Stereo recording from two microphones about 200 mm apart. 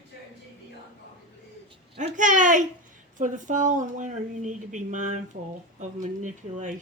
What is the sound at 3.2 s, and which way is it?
Speech, 40° right (ahead or behind).